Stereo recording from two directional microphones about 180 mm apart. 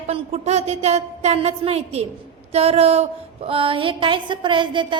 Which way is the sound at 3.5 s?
30° right (ahead or behind).